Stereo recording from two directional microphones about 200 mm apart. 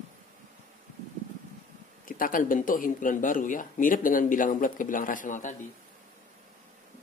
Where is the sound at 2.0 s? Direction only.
45° left (ahead or behind).